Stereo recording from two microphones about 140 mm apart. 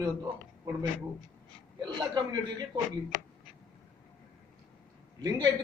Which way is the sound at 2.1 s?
30° right (ahead or behind).